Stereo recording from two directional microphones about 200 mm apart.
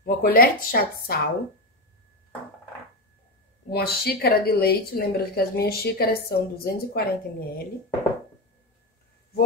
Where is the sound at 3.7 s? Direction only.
50° left (ahead or behind).